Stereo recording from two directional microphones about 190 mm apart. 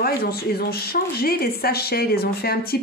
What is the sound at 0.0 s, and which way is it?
Speech, 55° left (ahead or behind).